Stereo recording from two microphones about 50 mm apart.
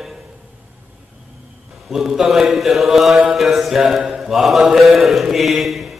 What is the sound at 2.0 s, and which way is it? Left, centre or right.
Mantra, centre.